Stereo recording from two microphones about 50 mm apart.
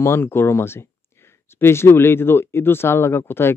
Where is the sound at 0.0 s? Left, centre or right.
Left.